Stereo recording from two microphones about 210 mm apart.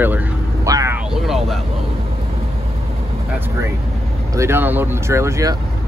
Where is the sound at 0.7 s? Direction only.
15° right (ahead or behind).